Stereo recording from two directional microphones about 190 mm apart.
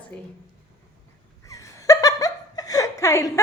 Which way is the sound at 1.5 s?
15° left (ahead or behind).